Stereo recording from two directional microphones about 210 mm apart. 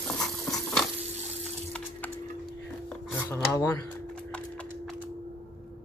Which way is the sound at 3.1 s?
10° left (ahead or behind).